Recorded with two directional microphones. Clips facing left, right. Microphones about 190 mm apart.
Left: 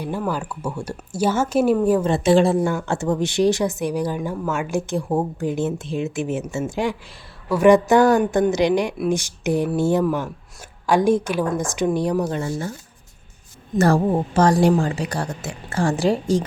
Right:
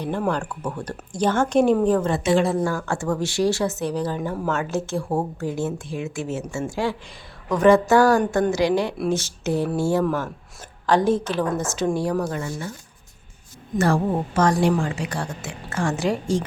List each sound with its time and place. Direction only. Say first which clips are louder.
0.3 s speech: right 1 dB; 5° left (ahead or behind)
2.0 s a woman's voice: left 4 dB; 30° left (ahead or behind)
13.7 s a woman's voice: left 3 dB; 40° left (ahead or behind)